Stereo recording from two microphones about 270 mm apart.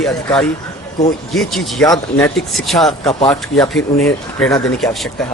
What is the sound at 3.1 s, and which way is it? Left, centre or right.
Speech, centre.